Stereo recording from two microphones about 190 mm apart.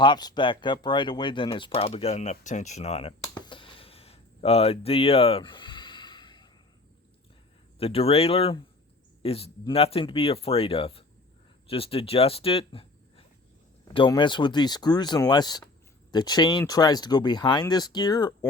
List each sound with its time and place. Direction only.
0.0 s speech: 20° left (ahead or behind)
7.8 s speech: 30° left (ahead or behind)